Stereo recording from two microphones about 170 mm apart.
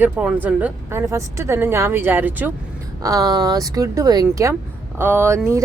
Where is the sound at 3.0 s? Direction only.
20° right (ahead or behind).